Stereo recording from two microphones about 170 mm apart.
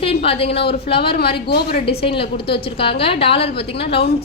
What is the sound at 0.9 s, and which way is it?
Speech, 70° left (ahead or behind).